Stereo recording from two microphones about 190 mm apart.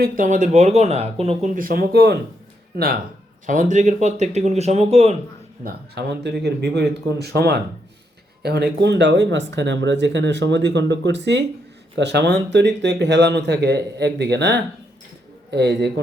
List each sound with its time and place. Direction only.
0.0 s speech: 45° right (ahead or behind)
3.4 s speech: 40° right (ahead or behind)
5.6 s speech: 60° right (ahead or behind)